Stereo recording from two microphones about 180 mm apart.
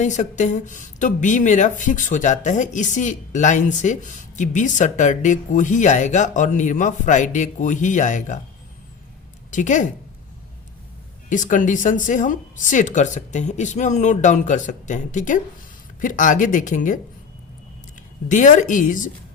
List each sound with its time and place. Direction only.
0.0 s speech: 45° left (ahead or behind)
9.5 s speech: 45° left (ahead or behind)
11.3 s speech: 45° left (ahead or behind)
18.3 s speech: 45° left (ahead or behind)